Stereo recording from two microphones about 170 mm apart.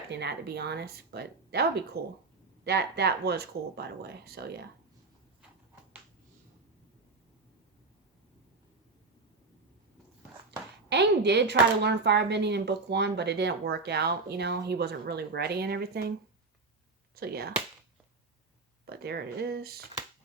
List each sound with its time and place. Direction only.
0.1 s speech: 80° right
10.8 s speech: 90° right; by 16.1 s 70° right (ahead or behind)
17.2 s speech: 65° right (ahead or behind)
18.9 s speech: 70° right (ahead or behind)